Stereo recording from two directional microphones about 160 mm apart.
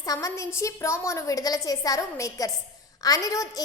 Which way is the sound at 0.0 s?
20° left (ahead or behind).